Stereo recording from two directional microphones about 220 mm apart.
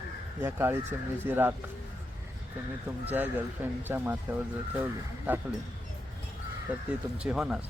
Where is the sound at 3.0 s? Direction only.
10° right (ahead or behind).